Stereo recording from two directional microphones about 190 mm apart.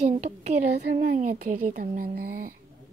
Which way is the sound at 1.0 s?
50° right (ahead or behind).